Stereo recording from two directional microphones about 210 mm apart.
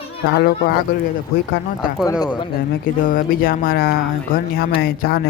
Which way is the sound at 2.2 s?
20° left (ahead or behind).